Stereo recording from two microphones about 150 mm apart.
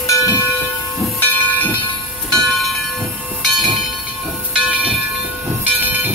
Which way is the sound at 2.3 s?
Centre (ahead or behind).